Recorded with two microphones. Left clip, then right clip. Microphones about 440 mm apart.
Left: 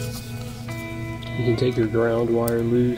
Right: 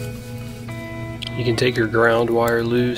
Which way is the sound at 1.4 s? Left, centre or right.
Centre.